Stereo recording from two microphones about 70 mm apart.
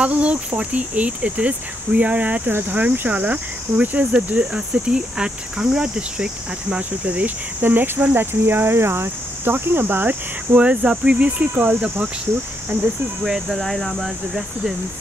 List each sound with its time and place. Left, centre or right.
0.0 s speech: centre
13.2 s speech: centre